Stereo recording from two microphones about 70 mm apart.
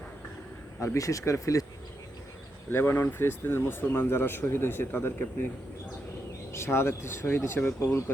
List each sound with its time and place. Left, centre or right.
0.9 s speech: left
2.6 s speech: left
6.5 s speech: left